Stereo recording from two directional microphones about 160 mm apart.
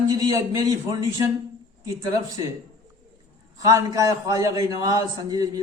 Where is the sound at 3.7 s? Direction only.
20° right (ahead or behind).